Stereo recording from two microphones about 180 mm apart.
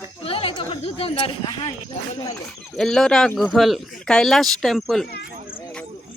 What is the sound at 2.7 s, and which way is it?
Speech, 5° left (ahead or behind).